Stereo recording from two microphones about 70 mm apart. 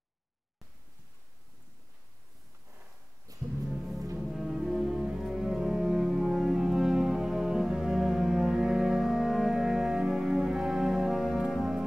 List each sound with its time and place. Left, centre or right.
3.3 s music: right
3.6 s music: centre